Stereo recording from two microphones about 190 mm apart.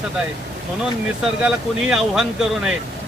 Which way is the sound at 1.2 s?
5° right (ahead or behind).